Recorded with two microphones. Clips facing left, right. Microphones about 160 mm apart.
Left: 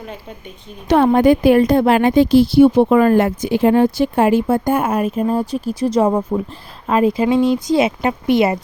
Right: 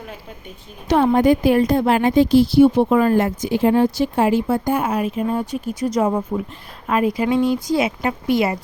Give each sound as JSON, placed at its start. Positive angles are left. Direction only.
{"t": 0.9, "sound": "a woman's voice", "side_deg": 65}